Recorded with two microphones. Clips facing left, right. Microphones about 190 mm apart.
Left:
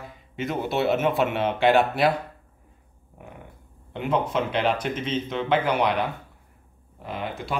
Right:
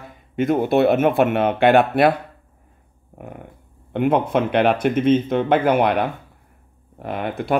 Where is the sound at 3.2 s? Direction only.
55° right (ahead or behind).